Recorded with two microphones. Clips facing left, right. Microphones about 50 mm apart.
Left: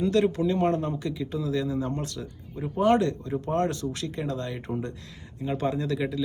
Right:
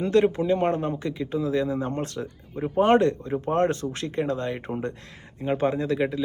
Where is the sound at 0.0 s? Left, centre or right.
Right.